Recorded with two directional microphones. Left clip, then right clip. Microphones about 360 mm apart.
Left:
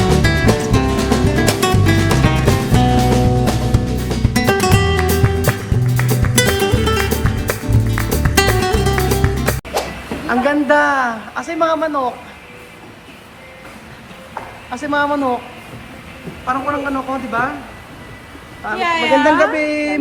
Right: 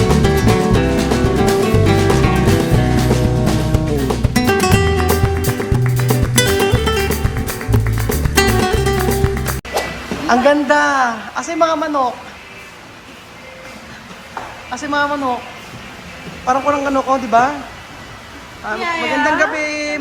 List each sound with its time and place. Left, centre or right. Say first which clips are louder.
0.0 s music: even; centre
14.7 s speech: left 1 dB; centre
16.5 s speech: right 4 dB; centre
18.8 s speech: left 4 dB; left
19.4 s speech: left 2 dB; centre